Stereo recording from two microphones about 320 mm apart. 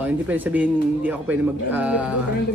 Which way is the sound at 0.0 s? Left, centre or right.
Centre.